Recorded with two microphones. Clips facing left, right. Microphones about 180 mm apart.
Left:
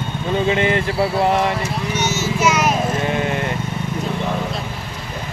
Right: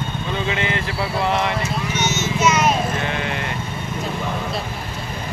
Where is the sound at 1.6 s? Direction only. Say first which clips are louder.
Left 1 dB; 35° left (ahead or behind).